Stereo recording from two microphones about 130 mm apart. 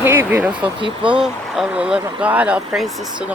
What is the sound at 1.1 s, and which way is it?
Speech, 5° right (ahead or behind).